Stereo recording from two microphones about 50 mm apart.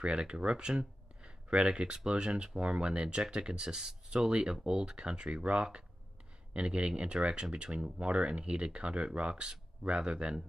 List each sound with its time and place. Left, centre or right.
0.0 s speech: right